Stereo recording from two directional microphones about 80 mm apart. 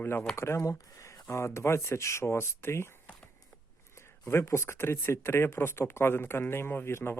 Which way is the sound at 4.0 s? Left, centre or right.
Left.